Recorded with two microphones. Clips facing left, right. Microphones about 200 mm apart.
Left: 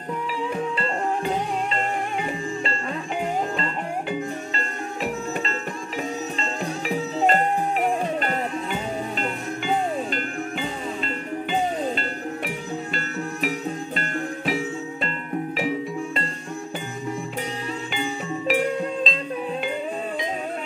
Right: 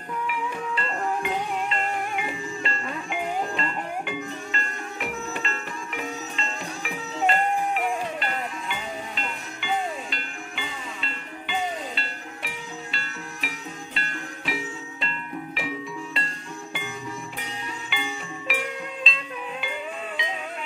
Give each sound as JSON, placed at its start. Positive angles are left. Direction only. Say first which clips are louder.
{"t": 0.3, "sound": "music", "louder": "left 5 dB", "side_deg": 35}
{"t": 17.9, "sound": "music", "louder": "left 5 dB", "side_deg": 40}